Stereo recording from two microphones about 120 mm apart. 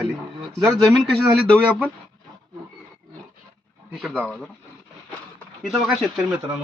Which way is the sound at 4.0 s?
5° left (ahead or behind).